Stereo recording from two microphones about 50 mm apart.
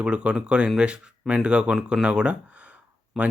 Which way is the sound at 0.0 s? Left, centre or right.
Right.